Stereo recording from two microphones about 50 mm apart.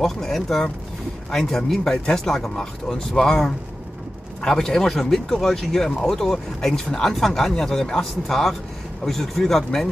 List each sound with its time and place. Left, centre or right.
0.0 s speech: centre